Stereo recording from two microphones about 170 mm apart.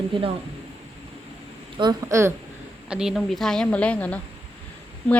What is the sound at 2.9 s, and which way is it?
A woman's voice, 5° right (ahead or behind).